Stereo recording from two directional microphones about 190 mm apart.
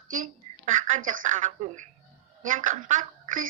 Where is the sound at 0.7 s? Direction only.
45° right (ahead or behind).